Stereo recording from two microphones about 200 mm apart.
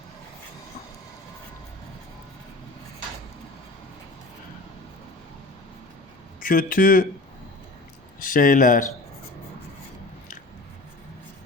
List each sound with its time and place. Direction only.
6.4 s speech: 45° left (ahead or behind)
8.2 s speech: 45° left (ahead or behind)